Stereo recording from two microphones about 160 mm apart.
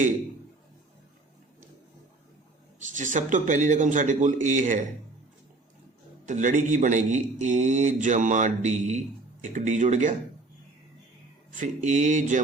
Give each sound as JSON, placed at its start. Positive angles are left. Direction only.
{"t": 2.9, "sound": "speech", "side_deg": -50}
{"t": 6.2, "sound": "speech", "side_deg": -50}
{"t": 11.5, "sound": "speech", "side_deg": -50}